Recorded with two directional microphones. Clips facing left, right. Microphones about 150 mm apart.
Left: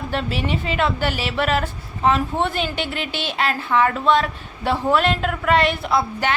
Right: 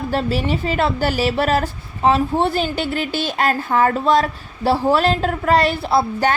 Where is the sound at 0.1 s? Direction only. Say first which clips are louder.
Right 3 dB; 40° right (ahead or behind).